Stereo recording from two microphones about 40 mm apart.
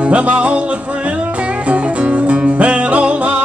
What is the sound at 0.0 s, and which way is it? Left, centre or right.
Music, right.